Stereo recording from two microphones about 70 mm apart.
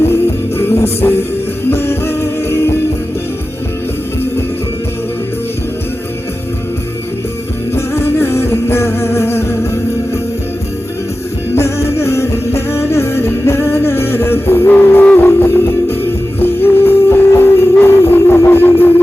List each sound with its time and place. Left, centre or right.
0.0 s music: left
7.7 s music: left
11.5 s music: left
15.4 s music: left